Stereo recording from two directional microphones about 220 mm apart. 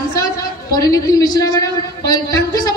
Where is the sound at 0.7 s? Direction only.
15° left (ahead or behind).